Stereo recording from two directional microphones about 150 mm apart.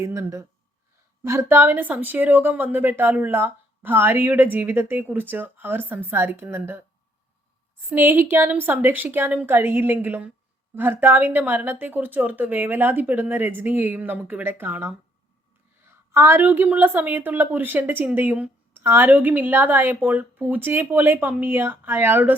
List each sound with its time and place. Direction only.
0.0 s a woman's voice: 20° right (ahead or behind)
7.9 s a woman's voice: 15° right (ahead or behind)